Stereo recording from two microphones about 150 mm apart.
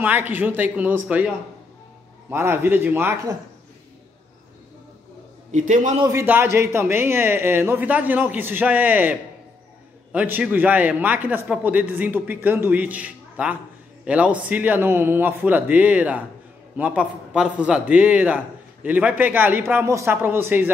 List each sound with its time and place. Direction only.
0.0 s a man's voice: 15° right (ahead or behind)
5.5 s a man's voice: 55° right (ahead or behind)
6.0 s a man's voice: 15° right (ahead or behind)